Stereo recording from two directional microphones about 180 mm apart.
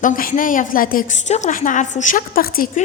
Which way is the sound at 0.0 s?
50° left (ahead or behind).